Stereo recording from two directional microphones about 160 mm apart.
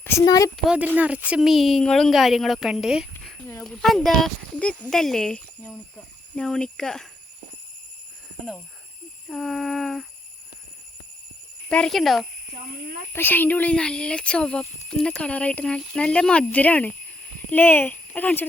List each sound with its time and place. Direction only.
0.0 s speech: 20° left (ahead or behind)
0.5 s a woman's voice: 5° right (ahead or behind)
9.3 s a woman's voice: centre (ahead or behind)
11.7 s a woman's voice: 5° left (ahead or behind)
13.1 s speech: 10° left (ahead or behind)